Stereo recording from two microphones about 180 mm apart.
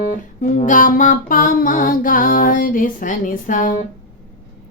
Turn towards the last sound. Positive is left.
turn(degrees=50)  # may be behind; listen again after turning